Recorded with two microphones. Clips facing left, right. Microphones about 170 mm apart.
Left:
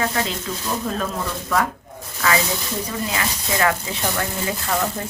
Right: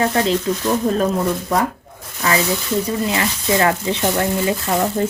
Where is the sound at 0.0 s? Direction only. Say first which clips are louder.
Right 7 dB; 30° right (ahead or behind).